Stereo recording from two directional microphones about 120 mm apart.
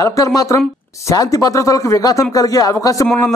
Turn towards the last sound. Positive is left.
turn(degrees=30)  # may be behind; listen again after turning